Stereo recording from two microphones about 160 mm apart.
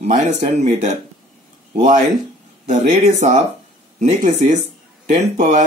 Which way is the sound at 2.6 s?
45° right (ahead or behind).